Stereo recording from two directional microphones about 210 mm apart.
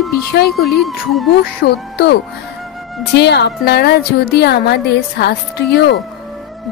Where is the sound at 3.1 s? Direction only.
50° left (ahead or behind).